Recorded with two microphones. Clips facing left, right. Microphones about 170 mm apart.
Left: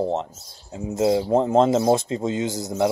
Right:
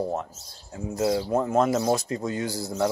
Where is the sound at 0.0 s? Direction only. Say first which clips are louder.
Left 4 dB; 25° left (ahead or behind).